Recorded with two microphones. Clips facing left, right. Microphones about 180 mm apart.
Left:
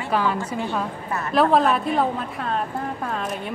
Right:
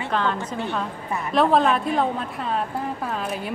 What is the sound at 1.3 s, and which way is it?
A woman's voice, centre (ahead or behind).